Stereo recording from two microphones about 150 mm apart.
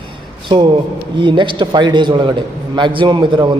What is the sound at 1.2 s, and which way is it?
A man's voice, 30° right (ahead or behind).